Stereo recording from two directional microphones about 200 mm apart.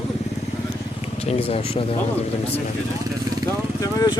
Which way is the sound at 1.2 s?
30° left (ahead or behind).